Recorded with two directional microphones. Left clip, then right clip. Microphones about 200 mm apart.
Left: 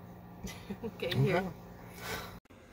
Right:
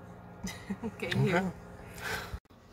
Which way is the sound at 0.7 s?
15° right (ahead or behind).